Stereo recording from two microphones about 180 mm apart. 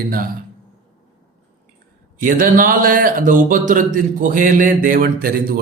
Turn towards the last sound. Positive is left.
turn(degrees=-55)  # may be behind; listen again after turning